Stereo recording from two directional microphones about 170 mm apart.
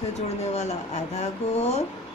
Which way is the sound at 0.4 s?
40° left (ahead or behind).